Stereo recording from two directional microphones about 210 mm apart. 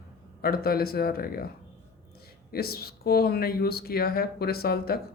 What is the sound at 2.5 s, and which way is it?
Speech, 45° left (ahead or behind).